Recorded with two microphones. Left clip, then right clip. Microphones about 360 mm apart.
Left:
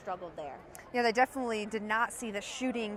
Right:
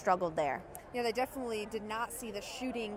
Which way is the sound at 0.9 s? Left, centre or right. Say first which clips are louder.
Left 6 dB; left.